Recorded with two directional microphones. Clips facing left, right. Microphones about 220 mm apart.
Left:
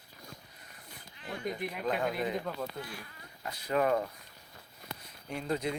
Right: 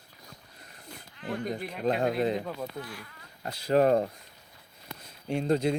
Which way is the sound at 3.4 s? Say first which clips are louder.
Right 6 dB; 35° right (ahead or behind).